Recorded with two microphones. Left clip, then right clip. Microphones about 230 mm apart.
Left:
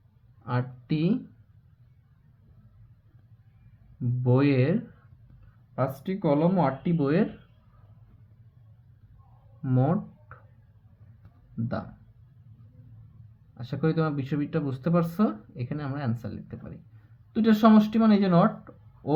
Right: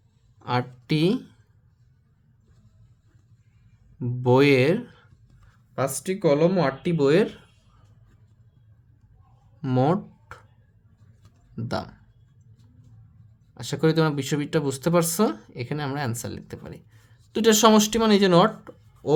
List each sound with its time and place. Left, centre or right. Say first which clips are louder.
0.4 s speech: right 6 dB; right
4.2 s speech: right 7 dB; right
9.6 s a sound: right 5 dB; right
11.5 s speech: right 4 dB; right
13.5 s speech: right 6 dB; right